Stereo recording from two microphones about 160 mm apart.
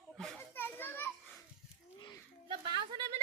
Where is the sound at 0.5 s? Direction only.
15° left (ahead or behind).